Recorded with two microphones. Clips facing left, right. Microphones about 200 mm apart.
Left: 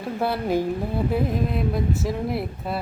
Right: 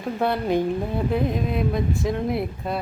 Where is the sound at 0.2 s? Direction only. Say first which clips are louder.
Right 1 dB; 5° left (ahead or behind).